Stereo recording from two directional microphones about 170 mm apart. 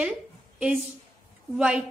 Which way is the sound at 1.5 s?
5° right (ahead or behind).